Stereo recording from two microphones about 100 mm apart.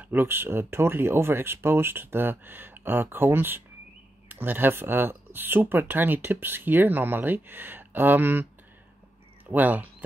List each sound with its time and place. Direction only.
0.0 s speech: 20° right (ahead or behind)
9.5 s speech: 15° right (ahead or behind)